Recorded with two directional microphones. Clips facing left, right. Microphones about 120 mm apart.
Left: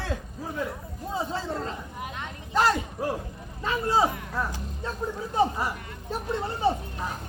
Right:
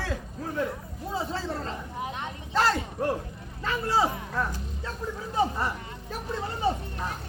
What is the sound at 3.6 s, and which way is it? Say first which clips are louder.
Speech: left 2 dB; 20° left (ahead or behind).